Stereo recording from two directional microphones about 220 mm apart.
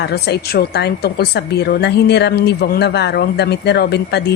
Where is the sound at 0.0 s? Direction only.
50° left (ahead or behind).